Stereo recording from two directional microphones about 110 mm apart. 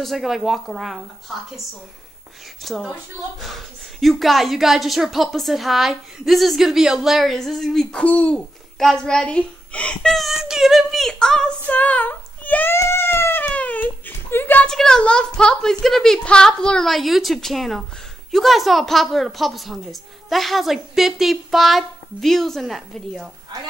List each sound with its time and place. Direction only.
0.0 s a woman's voice: centre (ahead or behind)
2.6 s a woman's voice: centre (ahead or behind)
12.7 s cat: 25° left (ahead or behind)
14.7 s a woman's voice: 5° left (ahead or behind)